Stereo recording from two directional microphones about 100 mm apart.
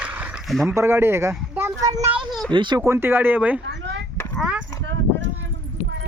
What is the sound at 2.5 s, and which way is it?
Speech, 50° right (ahead or behind).